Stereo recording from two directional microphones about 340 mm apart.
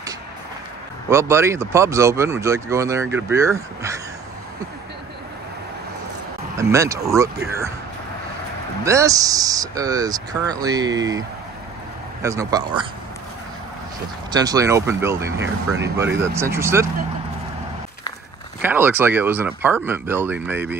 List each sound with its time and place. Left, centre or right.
1.1 s speech: centre
6.6 s speech: centre
8.8 s speech: centre
14.3 s speech: centre
18.6 s speech: centre